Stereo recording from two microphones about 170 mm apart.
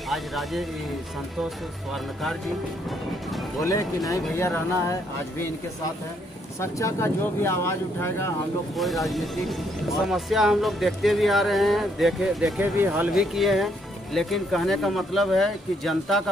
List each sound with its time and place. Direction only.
0.1 s speech: centre (ahead or behind)
4.1 s speech: 15° left (ahead or behind)
6.6 s speech: 15° left (ahead or behind)
8.7 s speech: centre (ahead or behind)